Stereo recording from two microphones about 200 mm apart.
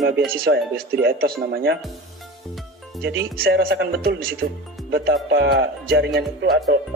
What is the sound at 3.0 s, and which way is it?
Speech, 50° right (ahead or behind).